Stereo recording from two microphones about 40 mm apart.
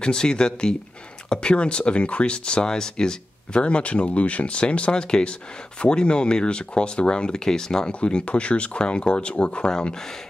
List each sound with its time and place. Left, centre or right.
0.0 s speech: left
7.9 s speech: left